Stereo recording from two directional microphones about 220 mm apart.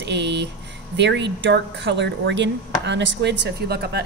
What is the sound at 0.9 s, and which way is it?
Speech, 50° right (ahead or behind).